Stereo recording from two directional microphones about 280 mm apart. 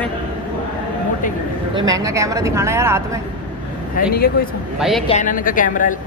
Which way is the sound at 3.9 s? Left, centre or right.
Left.